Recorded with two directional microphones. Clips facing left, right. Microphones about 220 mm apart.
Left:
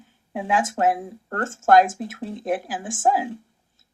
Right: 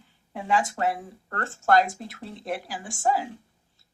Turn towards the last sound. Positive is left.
turn(degrees=50)  # may be behind; listen again after turning